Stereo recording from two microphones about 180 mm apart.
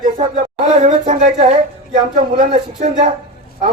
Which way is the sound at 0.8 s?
40° right (ahead or behind).